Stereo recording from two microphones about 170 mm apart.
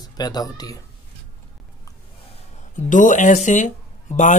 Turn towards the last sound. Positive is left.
turn(degrees=45)  # may be behind; listen again after turning